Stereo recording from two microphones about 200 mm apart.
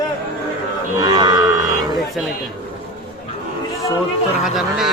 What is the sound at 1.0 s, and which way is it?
Speech, 20° right (ahead or behind).